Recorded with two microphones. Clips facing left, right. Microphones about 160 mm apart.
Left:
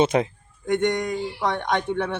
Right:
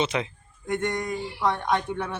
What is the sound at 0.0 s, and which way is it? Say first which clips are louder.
Speech: left 7 dB; 50° left (ahead or behind).